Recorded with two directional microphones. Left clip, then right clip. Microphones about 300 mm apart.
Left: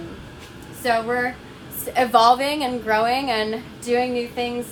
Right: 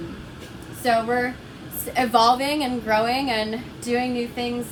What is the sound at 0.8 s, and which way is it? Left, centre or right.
A woman's voice, centre.